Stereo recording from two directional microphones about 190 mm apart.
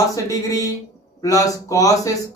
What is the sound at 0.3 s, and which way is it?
Speech, 15° left (ahead or behind).